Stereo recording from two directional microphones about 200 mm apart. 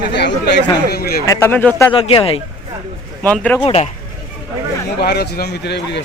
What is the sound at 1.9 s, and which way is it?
Speech, 25° left (ahead or behind).